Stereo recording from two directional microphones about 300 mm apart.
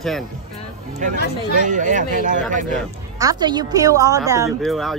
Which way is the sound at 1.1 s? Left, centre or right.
Left.